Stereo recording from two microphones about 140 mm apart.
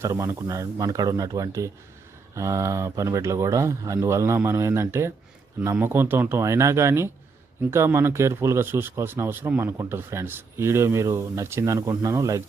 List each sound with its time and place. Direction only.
0.0 s speech: 20° right (ahead or behind)